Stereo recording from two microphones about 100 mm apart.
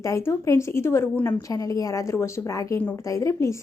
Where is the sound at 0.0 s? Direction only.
30° left (ahead or behind).